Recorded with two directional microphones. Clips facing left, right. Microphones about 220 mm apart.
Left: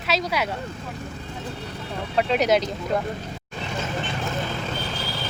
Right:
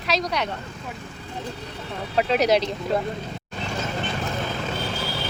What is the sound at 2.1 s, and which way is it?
Speech, centre (ahead or behind).